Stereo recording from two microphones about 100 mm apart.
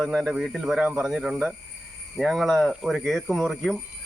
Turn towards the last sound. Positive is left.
turn(degrees=5)  # may be behind; listen again after turning